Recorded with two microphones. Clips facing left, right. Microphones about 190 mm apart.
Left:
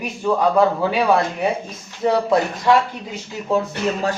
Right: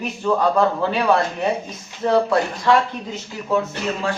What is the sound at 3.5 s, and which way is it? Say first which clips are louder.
Speech: left 2 dB; 35° left (ahead or behind).